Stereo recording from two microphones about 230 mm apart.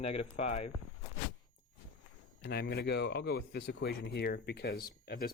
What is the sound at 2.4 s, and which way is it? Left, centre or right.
Speech, left.